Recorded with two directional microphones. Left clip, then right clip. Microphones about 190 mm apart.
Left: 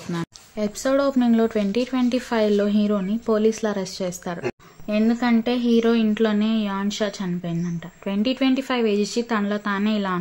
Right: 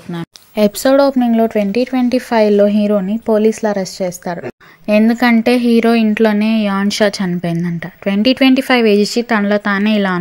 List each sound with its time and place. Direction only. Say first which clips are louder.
0.6 s speech: right 11 dB; 45° right (ahead or behind)
1.1 s speech: right 7 dB; 20° right (ahead or behind)
4.8 s a woman's voice: right 10 dB; 50° right (ahead or behind)